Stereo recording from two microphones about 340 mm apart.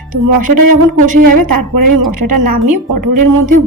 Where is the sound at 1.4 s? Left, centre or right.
Right.